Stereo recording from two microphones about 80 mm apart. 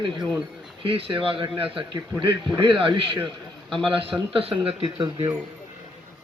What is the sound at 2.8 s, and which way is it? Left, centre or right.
Speech, right.